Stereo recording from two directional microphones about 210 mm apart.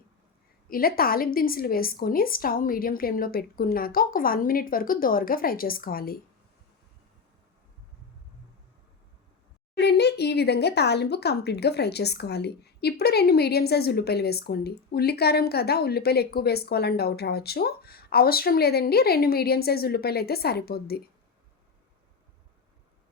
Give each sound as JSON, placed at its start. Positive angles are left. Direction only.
{"t": 0.7, "sound": "speech", "side_deg": 45}
{"t": 9.7, "sound": "speech", "side_deg": 55}